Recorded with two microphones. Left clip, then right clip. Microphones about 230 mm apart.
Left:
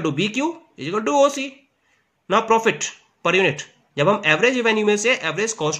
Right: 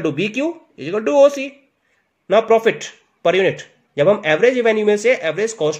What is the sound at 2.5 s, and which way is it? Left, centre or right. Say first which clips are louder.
A man's voice: right 3 dB; centre.